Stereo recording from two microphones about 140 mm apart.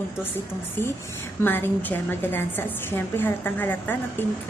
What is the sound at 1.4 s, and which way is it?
A woman's voice, 15° left (ahead or behind).